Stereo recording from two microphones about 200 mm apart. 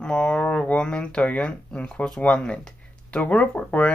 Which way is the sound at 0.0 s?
5° left (ahead or behind).